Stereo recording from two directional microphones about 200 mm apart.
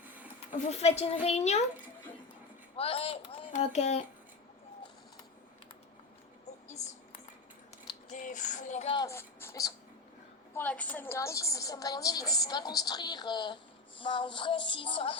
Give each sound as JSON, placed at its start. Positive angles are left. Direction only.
{"t": 0.0, "sound": "a sound", "side_deg": -10}
{"t": 0.5, "sound": "speech", "side_deg": 30}
{"t": 2.7, "sound": "speech", "side_deg": 30}
{"t": 6.7, "sound": "a sound", "side_deg": 35}
{"t": 8.1, "sound": "speech", "side_deg": 40}
{"t": 8.9, "sound": "a woman's voice", "side_deg": 20}
{"t": 14.0, "sound": "music", "side_deg": 25}